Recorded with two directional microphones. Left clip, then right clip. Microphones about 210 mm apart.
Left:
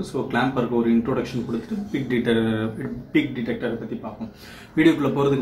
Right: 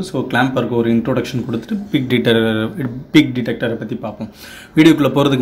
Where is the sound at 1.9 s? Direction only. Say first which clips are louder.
Right 8 dB; 40° right (ahead or behind).